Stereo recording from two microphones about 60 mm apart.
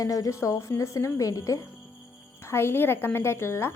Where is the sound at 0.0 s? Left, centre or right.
Left.